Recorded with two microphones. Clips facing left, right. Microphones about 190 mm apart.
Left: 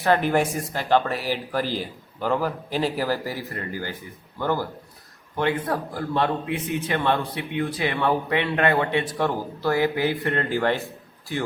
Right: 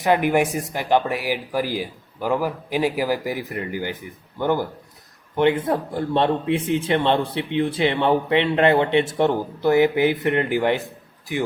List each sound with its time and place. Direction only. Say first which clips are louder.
0.0 s a man's voice: right 2 dB; 15° right (ahead or behind)